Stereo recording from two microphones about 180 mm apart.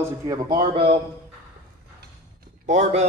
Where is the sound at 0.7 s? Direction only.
30° right (ahead or behind).